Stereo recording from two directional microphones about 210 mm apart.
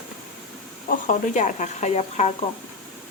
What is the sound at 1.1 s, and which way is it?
Speech, 35° left (ahead or behind).